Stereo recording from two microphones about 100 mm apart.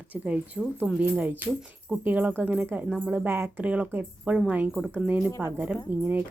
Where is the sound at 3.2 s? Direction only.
25° right (ahead or behind).